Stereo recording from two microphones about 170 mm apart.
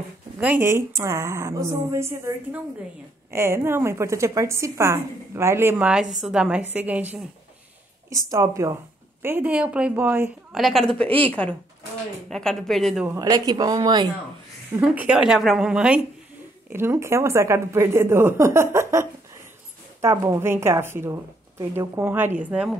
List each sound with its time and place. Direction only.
0.4 s a woman's voice: 10° right (ahead or behind)
8.3 s speech: 20° right (ahead or behind)
10.5 s a woman's voice: centre (ahead or behind)
13.0 s speech: 15° right (ahead or behind)
14.8 s a woman's voice: 5° right (ahead or behind)
16.7 s speech: 15° right (ahead or behind)